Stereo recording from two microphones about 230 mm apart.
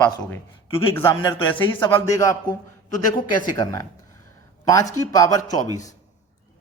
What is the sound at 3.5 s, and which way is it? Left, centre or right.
Speech, centre.